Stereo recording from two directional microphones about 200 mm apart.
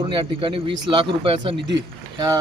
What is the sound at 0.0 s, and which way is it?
Speech, 25° right (ahead or behind).